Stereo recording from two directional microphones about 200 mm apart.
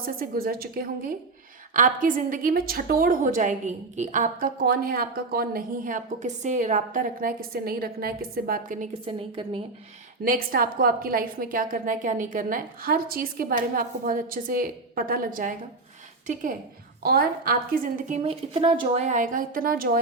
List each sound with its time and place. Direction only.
0.0 s a woman's voice: 45° right (ahead or behind); by 9.6 s 25° right (ahead or behind)
10.2 s a woman's voice: 45° right (ahead or behind)
18.2 s a woman's voice: 30° right (ahead or behind); by 20.0 s 45° right (ahead or behind)